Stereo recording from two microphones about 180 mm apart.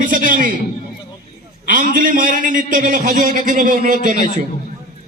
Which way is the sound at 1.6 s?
50° right (ahead or behind).